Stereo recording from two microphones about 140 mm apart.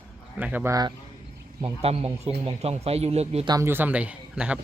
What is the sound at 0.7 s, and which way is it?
Speech, 30° right (ahead or behind).